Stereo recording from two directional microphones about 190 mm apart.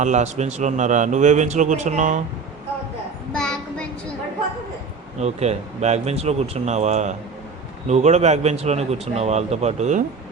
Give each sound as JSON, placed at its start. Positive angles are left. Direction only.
{"t": 0.0, "sound": "a man's voice", "side_deg": -40}
{"t": 3.3, "sound": "child singing", "side_deg": 5}
{"t": 5.2, "sound": "a man's voice", "side_deg": -35}